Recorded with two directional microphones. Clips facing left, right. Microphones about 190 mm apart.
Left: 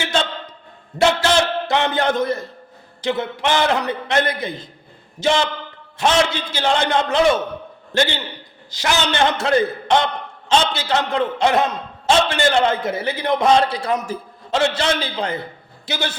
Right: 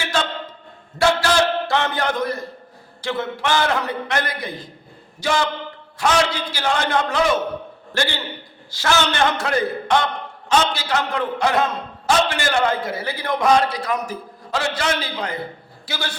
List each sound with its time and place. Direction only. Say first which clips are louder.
0.9 s a man's voice: left 1 dB; 20° left (ahead or behind)